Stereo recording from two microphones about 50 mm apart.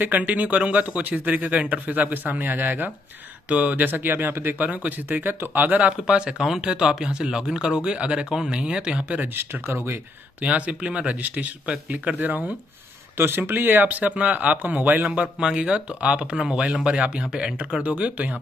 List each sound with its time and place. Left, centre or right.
0.0 s speech: right
4.6 s speech: right
5.8 s speech: right
9.2 s speech: right
10.4 s speech: right
13.2 s speech: right
15.4 s speech: centre
17.8 s speech: right